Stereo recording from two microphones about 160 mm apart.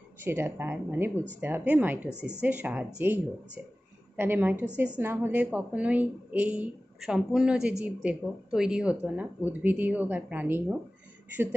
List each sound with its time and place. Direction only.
0.2 s speech: 15° right (ahead or behind)